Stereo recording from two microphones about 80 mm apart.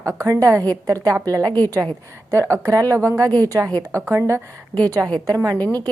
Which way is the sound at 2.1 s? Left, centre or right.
Right.